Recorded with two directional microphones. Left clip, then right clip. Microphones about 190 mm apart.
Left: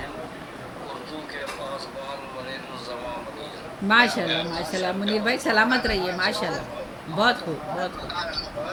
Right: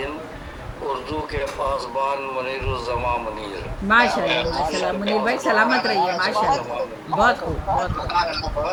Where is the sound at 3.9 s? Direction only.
Centre (ahead or behind).